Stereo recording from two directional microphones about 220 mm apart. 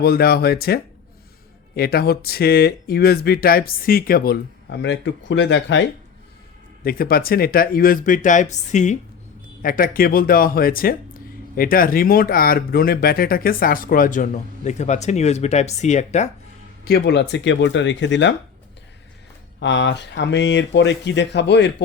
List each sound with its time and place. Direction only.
0.0 s speech: 45° left (ahead or behind)
6.8 s speech: 40° left (ahead or behind)
16.8 s speech: 50° left (ahead or behind)
19.5 s speech: 55° left (ahead or behind)